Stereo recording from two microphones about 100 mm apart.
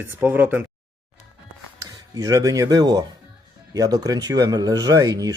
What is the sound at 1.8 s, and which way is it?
Speech, 35° right (ahead or behind).